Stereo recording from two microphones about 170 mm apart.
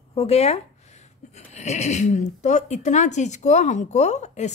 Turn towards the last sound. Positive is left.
turn(degrees=40)  # may be behind; listen again after turning